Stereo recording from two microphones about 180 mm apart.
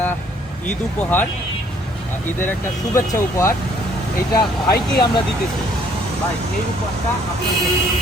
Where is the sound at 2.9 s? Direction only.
15° left (ahead or behind).